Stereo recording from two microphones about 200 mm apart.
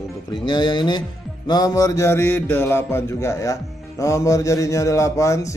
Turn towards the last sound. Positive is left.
turn(degrees=15)  # may be behind; listen again after turning